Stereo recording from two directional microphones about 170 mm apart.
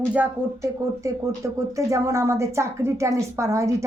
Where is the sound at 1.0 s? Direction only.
20° right (ahead or behind).